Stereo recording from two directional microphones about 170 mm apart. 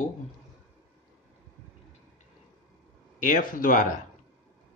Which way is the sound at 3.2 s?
50° left (ahead or behind).